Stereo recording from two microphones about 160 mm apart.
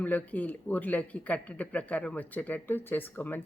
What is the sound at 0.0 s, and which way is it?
Speech, 10° left (ahead or behind).